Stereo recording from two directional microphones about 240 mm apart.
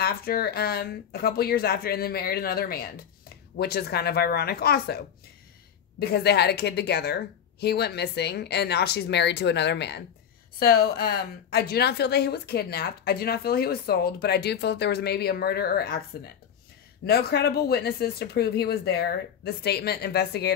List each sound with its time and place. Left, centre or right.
0.0 s a woman's voice: left
17.0 s a woman's voice: left